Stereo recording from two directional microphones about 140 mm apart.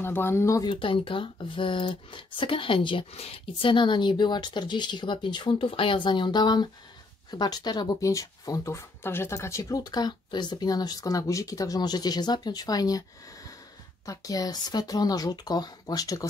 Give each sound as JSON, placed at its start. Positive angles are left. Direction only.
{"t": 0.0, "sound": "speech", "side_deg": 15}
{"t": 0.7, "sound": "speech", "side_deg": 40}